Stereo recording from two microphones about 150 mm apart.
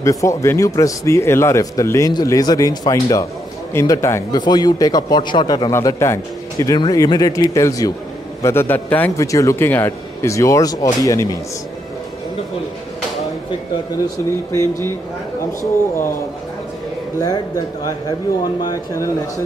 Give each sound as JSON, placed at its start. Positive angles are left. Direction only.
{"t": 0.0, "sound": "speech", "side_deg": 20}
{"t": 5.7, "sound": "speech", "side_deg": 20}
{"t": 14.0, "sound": "speech", "side_deg": 20}
{"t": 18.6, "sound": "speech", "side_deg": 25}